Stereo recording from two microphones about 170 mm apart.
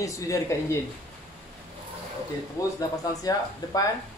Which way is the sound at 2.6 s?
20° left (ahead or behind).